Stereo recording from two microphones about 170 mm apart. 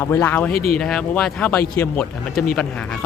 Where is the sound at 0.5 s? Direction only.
60° left (ahead or behind).